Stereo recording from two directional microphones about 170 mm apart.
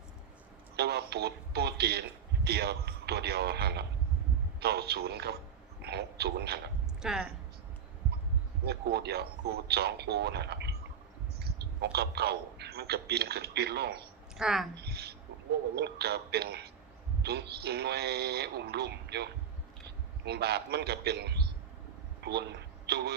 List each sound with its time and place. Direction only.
0.8 s a man's voice: 75° right (ahead or behind)
7.0 s speech: centre (ahead or behind)
8.6 s a man's voice: 70° right (ahead or behind)
14.3 s speech: centre (ahead or behind)
14.8 s a sound: 70° right (ahead or behind)
15.7 s a man's voice: 70° right (ahead or behind)
22.2 s a sound: 75° right (ahead or behind)